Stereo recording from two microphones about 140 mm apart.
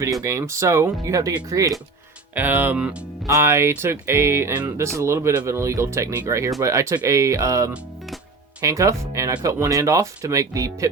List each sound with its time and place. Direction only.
0.0 s speech: 25° right (ahead or behind)
2.3 s speech: 15° right (ahead or behind)